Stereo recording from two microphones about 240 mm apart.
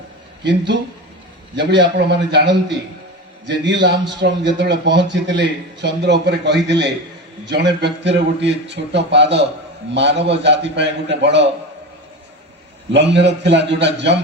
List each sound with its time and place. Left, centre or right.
1.5 s a man's voice: right
12.9 s a man's voice: right